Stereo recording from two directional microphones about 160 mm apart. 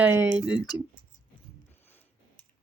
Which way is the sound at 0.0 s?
10° right (ahead or behind).